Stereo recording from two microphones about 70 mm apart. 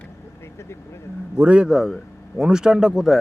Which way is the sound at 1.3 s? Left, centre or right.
Centre.